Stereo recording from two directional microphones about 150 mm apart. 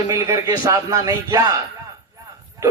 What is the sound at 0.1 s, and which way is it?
Speech, 25° right (ahead or behind).